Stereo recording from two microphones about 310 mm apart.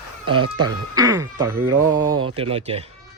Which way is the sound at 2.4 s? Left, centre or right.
Centre.